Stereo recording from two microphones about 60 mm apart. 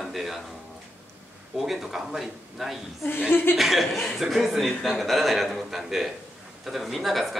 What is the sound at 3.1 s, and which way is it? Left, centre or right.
Speech, left.